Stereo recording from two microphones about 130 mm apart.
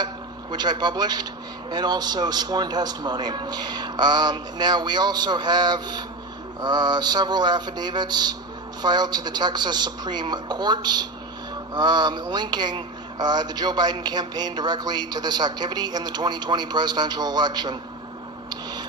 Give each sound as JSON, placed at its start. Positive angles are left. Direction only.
{"t": 0.5, "sound": "speech", "side_deg": -35}